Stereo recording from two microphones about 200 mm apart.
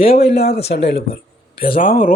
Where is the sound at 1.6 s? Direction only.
45° left (ahead or behind).